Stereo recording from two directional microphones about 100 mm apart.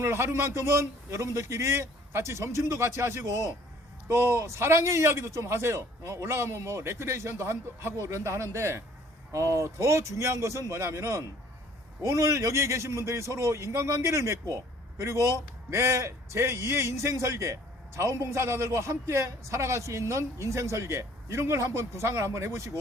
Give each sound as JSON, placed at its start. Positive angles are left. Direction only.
{"t": 0.0, "sound": "a man's voice", "side_deg": -25}